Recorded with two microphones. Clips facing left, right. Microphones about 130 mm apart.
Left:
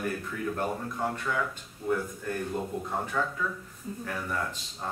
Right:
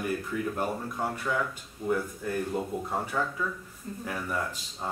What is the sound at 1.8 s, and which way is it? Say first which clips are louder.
Speech: even; 15° right (ahead or behind).